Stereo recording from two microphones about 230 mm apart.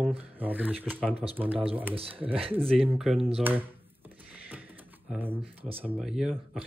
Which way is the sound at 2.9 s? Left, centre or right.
Centre.